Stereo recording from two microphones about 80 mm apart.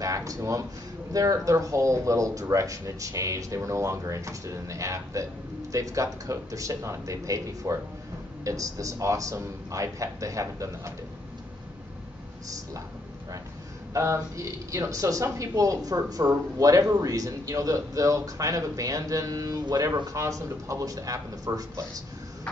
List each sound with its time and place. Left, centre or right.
0.0 s speech: right
13.9 s speech: right